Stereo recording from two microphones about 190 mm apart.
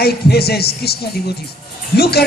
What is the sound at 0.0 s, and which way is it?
Speech, 55° left (ahead or behind).